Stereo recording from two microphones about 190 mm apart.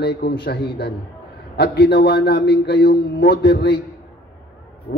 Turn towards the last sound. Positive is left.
turn(degrees=50)  # may be behind; listen again after turning